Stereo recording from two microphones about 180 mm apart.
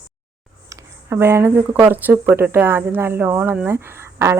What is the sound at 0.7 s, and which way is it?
Speech, 15° right (ahead or behind).